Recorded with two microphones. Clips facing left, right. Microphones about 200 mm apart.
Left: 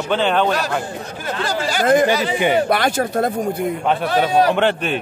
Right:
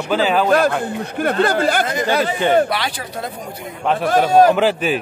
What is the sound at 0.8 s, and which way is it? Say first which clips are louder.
Speech: right 7 dB; 60° right (ahead or behind).